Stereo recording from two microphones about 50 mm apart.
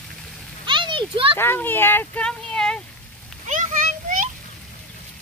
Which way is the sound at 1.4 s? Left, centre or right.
Left.